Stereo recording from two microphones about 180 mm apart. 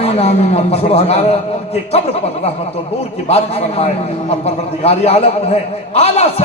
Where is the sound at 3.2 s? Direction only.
35° left (ahead or behind).